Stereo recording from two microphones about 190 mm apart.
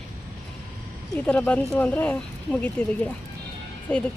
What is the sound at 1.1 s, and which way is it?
Speech, 5° left (ahead or behind).